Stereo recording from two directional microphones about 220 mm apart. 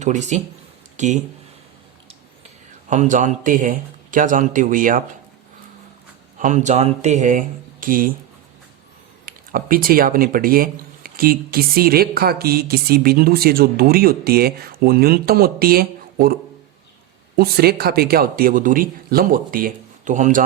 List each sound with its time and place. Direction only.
0.0 s speech: 30° right (ahead or behind)
2.9 s speech: 35° right (ahead or behind)
6.4 s speech: 35° right (ahead or behind)
9.2 s speech: 40° right (ahead or behind)